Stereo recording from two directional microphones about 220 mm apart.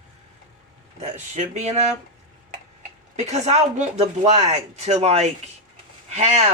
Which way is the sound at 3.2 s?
30° right (ahead or behind).